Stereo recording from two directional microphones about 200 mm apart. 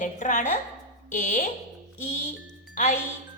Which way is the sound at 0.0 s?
40° left (ahead or behind).